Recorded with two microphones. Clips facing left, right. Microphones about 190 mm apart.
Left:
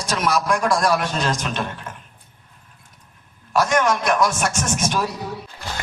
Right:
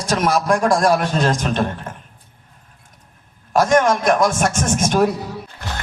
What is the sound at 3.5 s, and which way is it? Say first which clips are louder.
A man's voice: right 4 dB; 45° right (ahead or behind).